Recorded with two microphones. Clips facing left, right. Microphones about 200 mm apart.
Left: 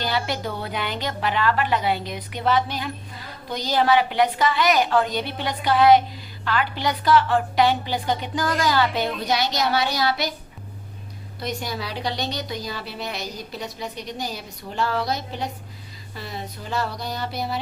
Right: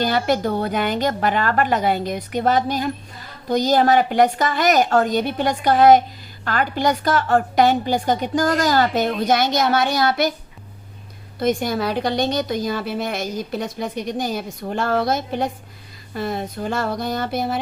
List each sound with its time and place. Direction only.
0.0 s a woman's voice: 45° right (ahead or behind)
11.3 s a woman's voice: 50° right (ahead or behind)